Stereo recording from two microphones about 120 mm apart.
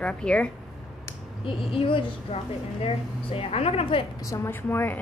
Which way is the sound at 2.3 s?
55° left (ahead or behind).